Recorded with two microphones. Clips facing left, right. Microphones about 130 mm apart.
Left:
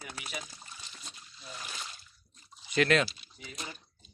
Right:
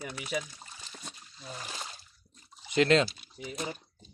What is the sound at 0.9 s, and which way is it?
Trickle, 50° right (ahead or behind).